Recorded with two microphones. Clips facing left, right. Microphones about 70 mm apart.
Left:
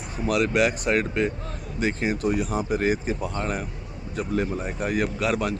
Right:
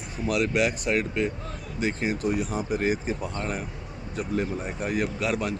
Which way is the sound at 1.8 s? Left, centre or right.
Left.